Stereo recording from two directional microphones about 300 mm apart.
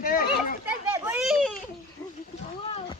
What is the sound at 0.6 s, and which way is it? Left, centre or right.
Children playing, centre.